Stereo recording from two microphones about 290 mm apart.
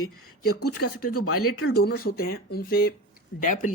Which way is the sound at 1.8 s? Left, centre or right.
Left.